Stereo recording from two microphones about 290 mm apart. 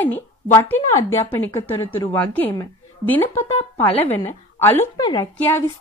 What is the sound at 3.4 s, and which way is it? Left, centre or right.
Speech, left.